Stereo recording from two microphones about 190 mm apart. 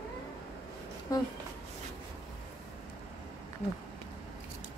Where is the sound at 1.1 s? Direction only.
20° left (ahead or behind).